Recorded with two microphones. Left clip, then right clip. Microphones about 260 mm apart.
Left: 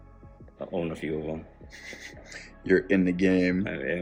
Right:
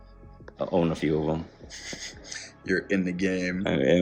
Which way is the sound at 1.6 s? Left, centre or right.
Centre.